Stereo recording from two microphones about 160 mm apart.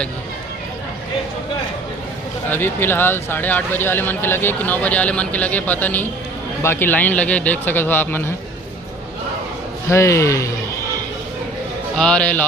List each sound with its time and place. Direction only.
2.5 s speech: 15° left (ahead or behind)
9.9 s speech: 20° left (ahead or behind)
11.9 s speech: 5° left (ahead or behind)